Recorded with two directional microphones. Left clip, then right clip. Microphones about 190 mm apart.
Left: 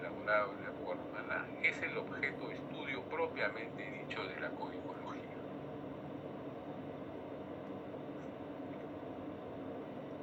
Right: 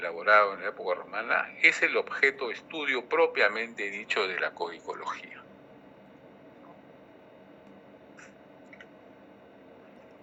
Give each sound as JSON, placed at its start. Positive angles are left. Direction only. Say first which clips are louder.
{"t": 0.0, "sound": "speech", "louder": "right 12 dB", "side_deg": -55}